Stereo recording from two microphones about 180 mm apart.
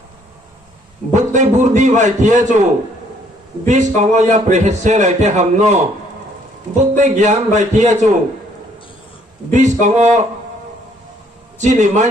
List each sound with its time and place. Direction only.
1.1 s a man's voice: 40° right (ahead or behind)
3.6 s a man's voice: 40° right (ahead or behind)
6.8 s a man's voice: 40° right (ahead or behind)
9.5 s a man's voice: 40° right (ahead or behind)
11.5 s a man's voice: 40° right (ahead or behind)